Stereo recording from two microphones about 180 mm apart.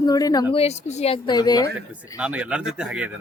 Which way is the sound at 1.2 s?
25° left (ahead or behind).